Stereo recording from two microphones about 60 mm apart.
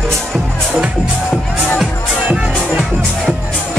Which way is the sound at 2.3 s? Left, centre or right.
Centre.